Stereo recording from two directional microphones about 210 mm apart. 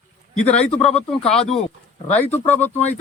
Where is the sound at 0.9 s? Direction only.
5° left (ahead or behind).